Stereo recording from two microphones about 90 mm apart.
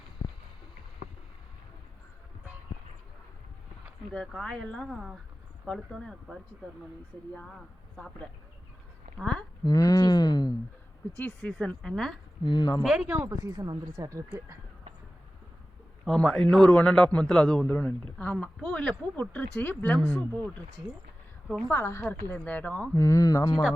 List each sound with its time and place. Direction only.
4.1 s a man's voice: 5° left (ahead or behind)
7.9 s a man's voice: 5° left (ahead or behind)
9.6 s a sound: 40° left (ahead or behind)
11.2 s a man's voice: 20° left (ahead or behind)
12.5 s speech: 50° left (ahead or behind)
12.8 s speech: 5° right (ahead or behind)
13.2 s speech: 40° right (ahead or behind)
16.0 s a man's voice: 5° left (ahead or behind)
21.7 s speech: 30° left (ahead or behind)
22.3 s a man's voice: 20° left (ahead or behind)
23.0 s speech: 35° left (ahead or behind)